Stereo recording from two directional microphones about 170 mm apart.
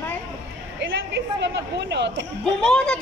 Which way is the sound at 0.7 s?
90° right.